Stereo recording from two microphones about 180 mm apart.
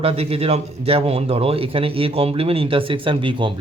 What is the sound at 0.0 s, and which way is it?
A man's voice, 35° right (ahead or behind).